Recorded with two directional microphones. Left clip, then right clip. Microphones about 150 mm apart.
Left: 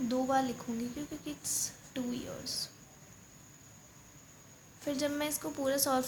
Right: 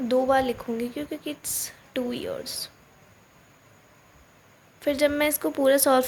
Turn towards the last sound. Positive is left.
turn(degrees=-50)  # may be behind; listen again after turning